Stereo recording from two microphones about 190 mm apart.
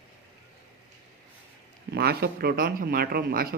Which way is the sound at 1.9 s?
55° right (ahead or behind).